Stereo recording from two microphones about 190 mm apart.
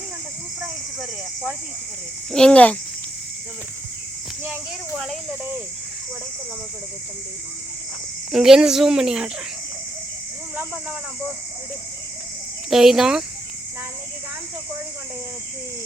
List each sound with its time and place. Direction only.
2.3 s speech: 5° left (ahead or behind)
8.3 s speech: 5° right (ahead or behind)
12.7 s speech: centre (ahead or behind)